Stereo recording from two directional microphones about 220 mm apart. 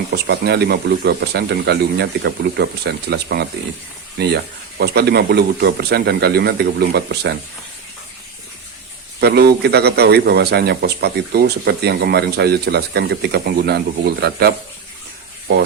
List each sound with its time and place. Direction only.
0.1 s a man's voice: 50° right (ahead or behind)
9.2 s a man's voice: 45° right (ahead or behind)